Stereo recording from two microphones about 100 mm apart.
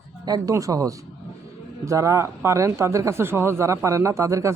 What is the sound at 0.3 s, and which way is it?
Speech, 40° right (ahead or behind).